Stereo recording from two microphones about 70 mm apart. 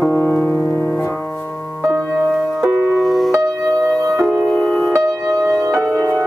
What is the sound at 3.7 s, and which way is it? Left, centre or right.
Music, centre.